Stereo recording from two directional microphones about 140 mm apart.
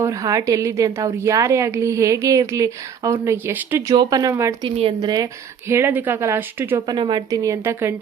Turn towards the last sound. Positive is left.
turn(degrees=-20)  # may be behind; listen again after turning